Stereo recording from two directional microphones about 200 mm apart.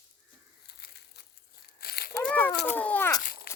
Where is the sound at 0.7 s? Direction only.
55° left (ahead or behind).